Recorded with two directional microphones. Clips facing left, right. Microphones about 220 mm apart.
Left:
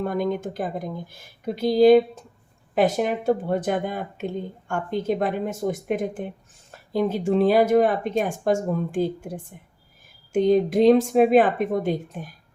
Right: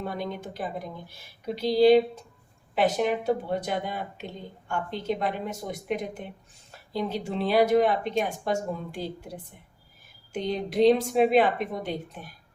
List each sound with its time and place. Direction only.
0.0 s speech: 50° left (ahead or behind)
3.2 s speech: 50° left (ahead or behind)